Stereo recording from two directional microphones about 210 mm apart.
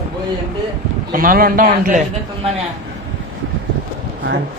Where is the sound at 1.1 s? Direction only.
40° right (ahead or behind).